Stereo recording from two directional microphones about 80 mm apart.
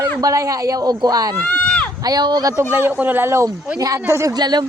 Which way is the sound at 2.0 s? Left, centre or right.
Right.